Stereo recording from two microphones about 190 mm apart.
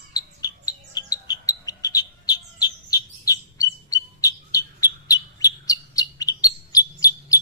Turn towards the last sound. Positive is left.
turn(degrees=20)  # may be behind; listen again after turning